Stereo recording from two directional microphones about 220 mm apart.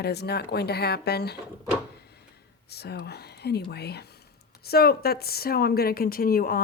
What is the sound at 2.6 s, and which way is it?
Speech, 45° left (ahead or behind).